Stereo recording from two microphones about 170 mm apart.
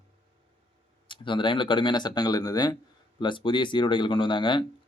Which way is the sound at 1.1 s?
30° left (ahead or behind).